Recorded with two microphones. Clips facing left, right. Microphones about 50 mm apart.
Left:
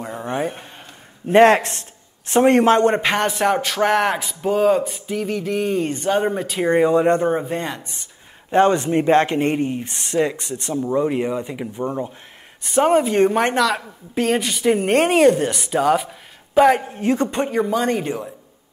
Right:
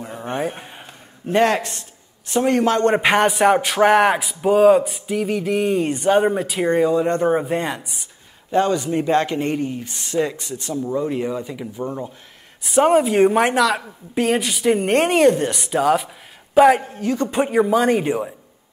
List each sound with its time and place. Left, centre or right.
0.4 s a sound: centre
1.3 s a man's voice: left
3.0 s a man's voice: centre
8.5 s speech: left
9.8 s speech: left
10.7 s speech: left
12.6 s a woman's voice: centre
16.9 s speech: left
17.3 s a man's voice: centre